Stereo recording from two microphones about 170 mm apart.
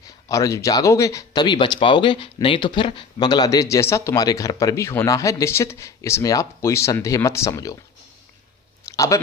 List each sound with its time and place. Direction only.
0.3 s speech: 20° left (ahead or behind)
8.9 s speech: 20° left (ahead or behind)